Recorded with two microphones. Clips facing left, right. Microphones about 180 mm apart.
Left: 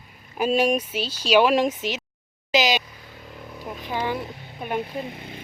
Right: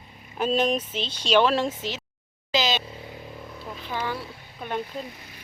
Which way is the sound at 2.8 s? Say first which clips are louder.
Right 8 dB; 25° right (ahead or behind).